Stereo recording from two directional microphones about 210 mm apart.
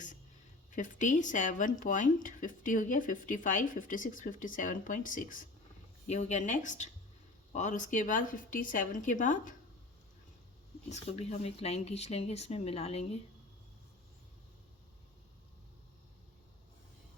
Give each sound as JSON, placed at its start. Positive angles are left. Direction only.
{"t": 0.7, "sound": "speech", "side_deg": 35}
{"t": 10.8, "sound": "speech", "side_deg": 30}